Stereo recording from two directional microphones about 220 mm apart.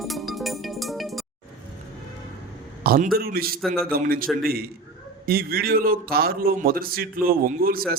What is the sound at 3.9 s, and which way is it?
A man's voice, 40° right (ahead or behind).